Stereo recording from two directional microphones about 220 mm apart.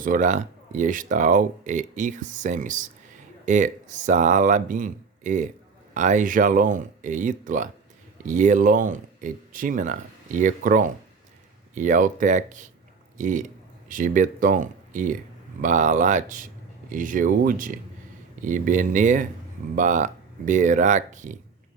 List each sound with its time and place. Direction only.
0.0 s speech: 35° right (ahead or behind)